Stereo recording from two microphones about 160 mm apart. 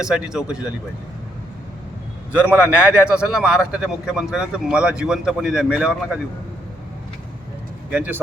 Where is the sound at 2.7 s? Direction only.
5° right (ahead or behind).